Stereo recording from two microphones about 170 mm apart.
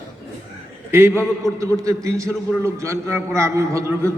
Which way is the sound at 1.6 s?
20° right (ahead or behind).